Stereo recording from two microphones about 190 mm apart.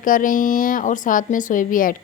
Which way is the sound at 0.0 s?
45° left (ahead or behind).